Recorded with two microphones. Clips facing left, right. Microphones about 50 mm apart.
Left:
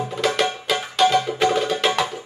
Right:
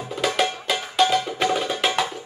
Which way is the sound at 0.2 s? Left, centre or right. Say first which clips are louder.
Left 1 dB; centre.